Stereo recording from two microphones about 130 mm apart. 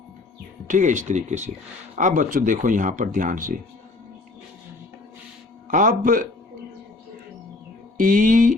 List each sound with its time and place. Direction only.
0.7 s speech: 70° right (ahead or behind)
2.0 s speech: 85° right
5.7 s speech: 85° right
7.9 s speech: 90° right